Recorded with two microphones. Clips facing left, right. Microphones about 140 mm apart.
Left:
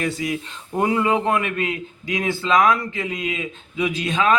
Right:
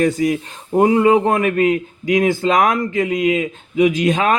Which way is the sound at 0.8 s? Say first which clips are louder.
Right 7 dB; 35° right (ahead or behind).